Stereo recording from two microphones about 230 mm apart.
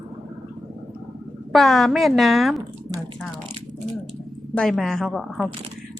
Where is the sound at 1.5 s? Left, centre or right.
Centre.